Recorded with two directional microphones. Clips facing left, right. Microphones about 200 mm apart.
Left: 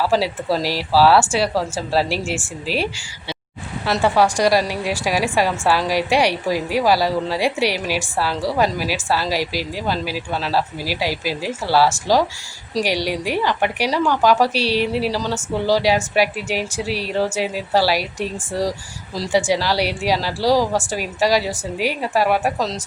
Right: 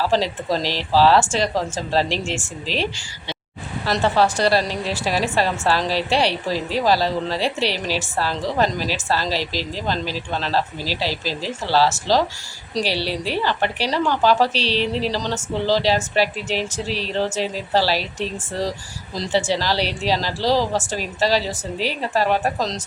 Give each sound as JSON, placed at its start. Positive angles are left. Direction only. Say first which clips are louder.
{"t": 0.0, "sound": "a woman's voice", "louder": "left 1 dB", "side_deg": 10}